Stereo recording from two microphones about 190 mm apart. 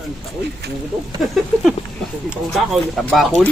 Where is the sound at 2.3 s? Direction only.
Centre (ahead or behind).